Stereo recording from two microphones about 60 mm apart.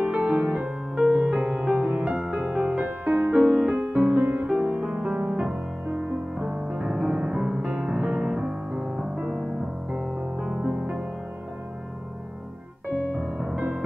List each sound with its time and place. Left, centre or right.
0.0 s music: centre
13.4 s music: centre